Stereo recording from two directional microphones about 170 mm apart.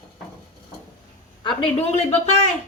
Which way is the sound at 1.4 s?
35° left (ahead or behind).